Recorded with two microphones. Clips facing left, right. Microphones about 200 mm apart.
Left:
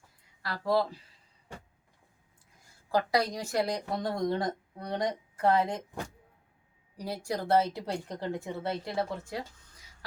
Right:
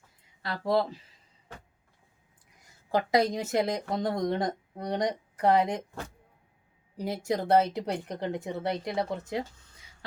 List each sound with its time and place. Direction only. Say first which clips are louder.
0.4 s speech: right 1 dB; 20° right (ahead or behind)
2.9 s speech: right 3 dB; 20° right (ahead or behind)
6.9 s speech: right 4 dB; 20° right (ahead or behind)